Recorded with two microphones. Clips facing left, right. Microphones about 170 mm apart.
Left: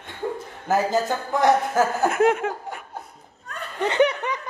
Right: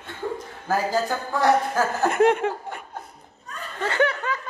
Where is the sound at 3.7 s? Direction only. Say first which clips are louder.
Left 3 dB; 20° left (ahead or behind).